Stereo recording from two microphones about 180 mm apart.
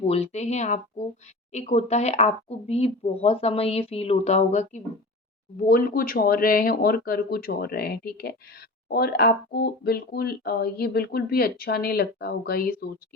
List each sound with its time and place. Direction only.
0.0 s speech: 35° left (ahead or behind)
5.6 s speech: 50° left (ahead or behind)